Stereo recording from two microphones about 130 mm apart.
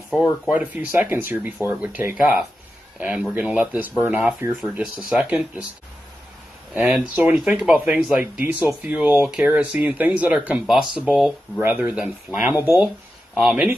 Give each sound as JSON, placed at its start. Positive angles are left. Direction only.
{"t": 0.2, "sound": "speech", "side_deg": -15}
{"t": 6.7, "sound": "speech", "side_deg": -10}
{"t": 13.3, "sound": "speech", "side_deg": 0}